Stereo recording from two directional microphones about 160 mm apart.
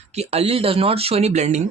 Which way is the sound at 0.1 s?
40° right (ahead or behind).